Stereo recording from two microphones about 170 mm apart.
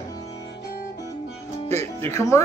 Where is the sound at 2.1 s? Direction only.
15° left (ahead or behind).